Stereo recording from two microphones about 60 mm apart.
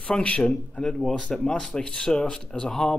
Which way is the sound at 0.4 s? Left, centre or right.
Centre.